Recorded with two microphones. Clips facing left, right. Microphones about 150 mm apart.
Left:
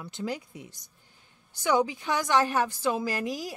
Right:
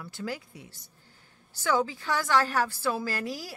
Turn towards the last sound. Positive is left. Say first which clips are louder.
# left 3 dB
turn(degrees=20)  # may be behind; listen again after turning